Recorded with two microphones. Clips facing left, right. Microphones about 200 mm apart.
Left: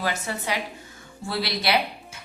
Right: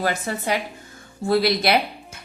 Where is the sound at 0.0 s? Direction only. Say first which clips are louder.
Right 4 dB; 45° right (ahead or behind).